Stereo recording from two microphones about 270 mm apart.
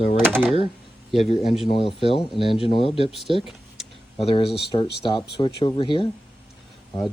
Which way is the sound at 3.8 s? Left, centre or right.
Centre.